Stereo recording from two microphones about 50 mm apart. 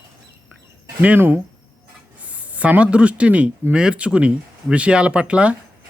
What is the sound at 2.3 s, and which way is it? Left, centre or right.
Speech, right.